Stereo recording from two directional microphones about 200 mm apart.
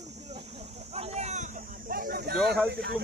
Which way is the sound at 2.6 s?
50° right (ahead or behind).